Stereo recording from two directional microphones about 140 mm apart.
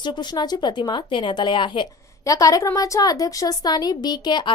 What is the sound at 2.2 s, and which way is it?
A woman's voice, 25° left (ahead or behind).